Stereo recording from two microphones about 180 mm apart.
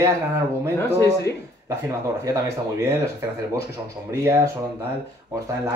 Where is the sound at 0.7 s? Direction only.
10° left (ahead or behind).